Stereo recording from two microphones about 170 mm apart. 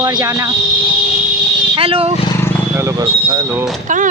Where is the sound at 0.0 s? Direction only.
20° right (ahead or behind).